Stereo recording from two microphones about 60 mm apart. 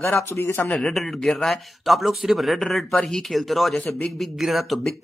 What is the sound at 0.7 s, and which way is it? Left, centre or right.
A man's voice, centre.